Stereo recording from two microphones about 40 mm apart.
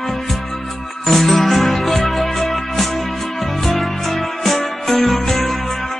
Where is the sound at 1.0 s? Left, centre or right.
Centre.